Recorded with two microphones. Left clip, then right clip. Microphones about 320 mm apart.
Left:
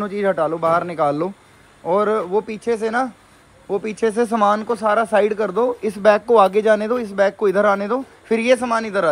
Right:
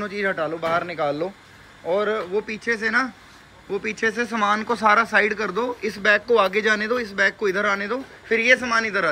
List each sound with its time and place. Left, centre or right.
0.0 s speech: centre